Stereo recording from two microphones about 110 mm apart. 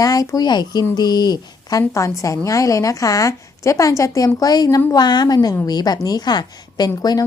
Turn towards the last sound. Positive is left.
turn(degrees=35)  # may be behind; listen again after turning